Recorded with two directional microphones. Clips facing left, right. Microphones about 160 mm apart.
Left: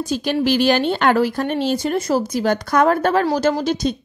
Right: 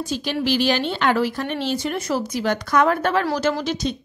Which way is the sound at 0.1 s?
50° left (ahead or behind).